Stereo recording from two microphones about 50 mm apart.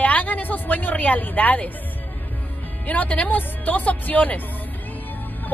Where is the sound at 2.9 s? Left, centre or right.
Left.